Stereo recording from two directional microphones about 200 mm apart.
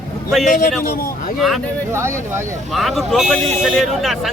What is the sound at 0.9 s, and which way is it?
Speech, 45° left (ahead or behind).